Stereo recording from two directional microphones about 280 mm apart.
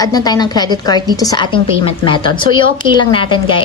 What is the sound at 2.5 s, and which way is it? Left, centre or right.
Speech, right.